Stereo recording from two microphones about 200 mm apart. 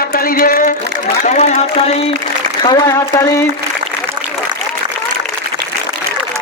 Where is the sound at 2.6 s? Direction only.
20° left (ahead or behind).